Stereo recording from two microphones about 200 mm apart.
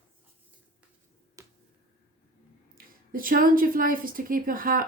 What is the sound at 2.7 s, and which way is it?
A woman's voice, 45° right (ahead or behind).